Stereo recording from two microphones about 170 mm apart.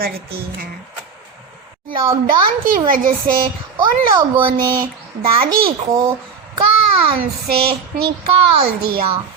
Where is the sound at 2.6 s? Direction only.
55° right (ahead or behind).